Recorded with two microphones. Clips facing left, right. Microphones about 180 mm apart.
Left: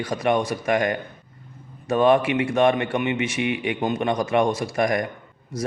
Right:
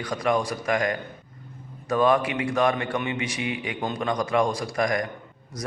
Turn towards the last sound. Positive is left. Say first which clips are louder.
# left 3 dB
turn(degrees=25)  # may be behind; listen again after turning